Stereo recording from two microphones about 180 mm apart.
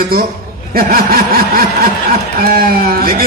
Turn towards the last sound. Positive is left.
turn(degrees=-55)  # may be behind; listen again after turning